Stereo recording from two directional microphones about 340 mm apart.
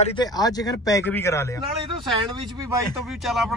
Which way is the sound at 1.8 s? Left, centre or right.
Centre.